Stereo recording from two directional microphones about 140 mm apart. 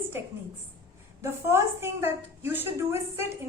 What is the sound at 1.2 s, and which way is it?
A woman's voice, 15° right (ahead or behind).